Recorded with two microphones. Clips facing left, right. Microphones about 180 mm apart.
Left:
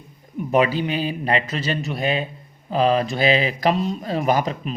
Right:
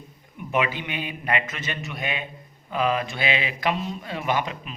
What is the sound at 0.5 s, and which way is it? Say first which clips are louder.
Speech: left 7 dB; 35° left (ahead or behind).